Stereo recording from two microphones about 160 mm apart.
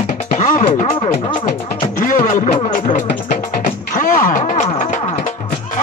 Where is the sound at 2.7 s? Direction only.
50° left (ahead or behind).